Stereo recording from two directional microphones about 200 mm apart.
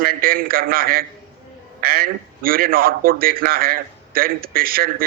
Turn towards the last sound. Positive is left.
turn(degrees=-45)  # may be behind; listen again after turning